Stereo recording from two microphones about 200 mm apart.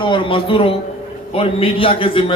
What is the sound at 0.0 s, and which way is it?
A man's voice, 25° left (ahead or behind).